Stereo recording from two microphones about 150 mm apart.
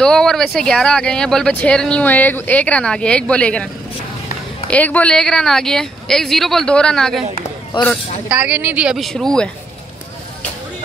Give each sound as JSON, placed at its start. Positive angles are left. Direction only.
{"t": 0.0, "sound": "speech", "side_deg": 5}
{"t": 4.6, "sound": "speech", "side_deg": 10}
{"t": 8.3, "sound": "speech", "side_deg": -10}